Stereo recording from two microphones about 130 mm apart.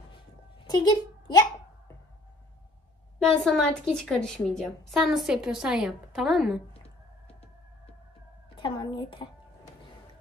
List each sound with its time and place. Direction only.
0.7 s a child's voice: 30° left (ahead or behind)
3.2 s a woman's voice: 5° left (ahead or behind)
8.5 s a woman's voice: 35° left (ahead or behind)